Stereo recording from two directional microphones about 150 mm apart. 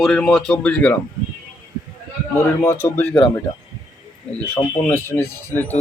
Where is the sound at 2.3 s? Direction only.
15° left (ahead or behind).